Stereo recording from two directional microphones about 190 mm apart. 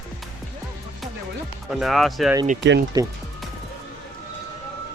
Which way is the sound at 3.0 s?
20° right (ahead or behind).